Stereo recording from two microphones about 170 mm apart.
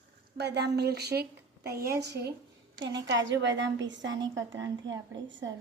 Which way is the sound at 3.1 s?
90° right.